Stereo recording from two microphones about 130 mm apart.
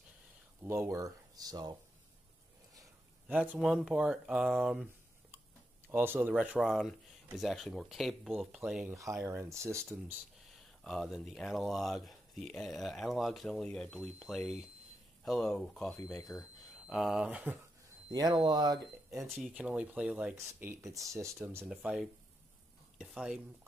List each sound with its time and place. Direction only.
0.7 s speech: 25° right (ahead or behind)
3.5 s speech: centre (ahead or behind)
5.9 s speech: 15° right (ahead or behind)
6.6 s speech: centre (ahead or behind)
8.9 s speech: 25° right (ahead or behind)
10.8 s speech: centre (ahead or behind)
18.1 s speech: 30° right (ahead or behind)
19.0 s speech: centre (ahead or behind)
20.8 s speech: 25° right (ahead or behind)
21.6 s speech: 5° right (ahead or behind)